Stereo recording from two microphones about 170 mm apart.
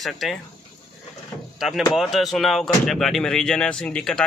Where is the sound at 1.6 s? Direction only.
Centre (ahead or behind).